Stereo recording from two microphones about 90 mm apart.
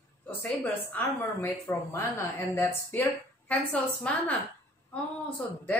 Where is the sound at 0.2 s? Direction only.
20° left (ahead or behind).